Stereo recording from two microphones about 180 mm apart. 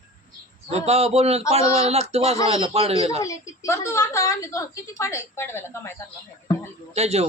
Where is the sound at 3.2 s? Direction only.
15° left (ahead or behind).